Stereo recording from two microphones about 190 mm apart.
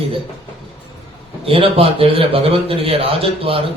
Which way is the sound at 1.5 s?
30° right (ahead or behind).